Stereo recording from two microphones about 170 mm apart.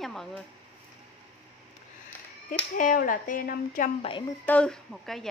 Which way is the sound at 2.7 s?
50° left (ahead or behind).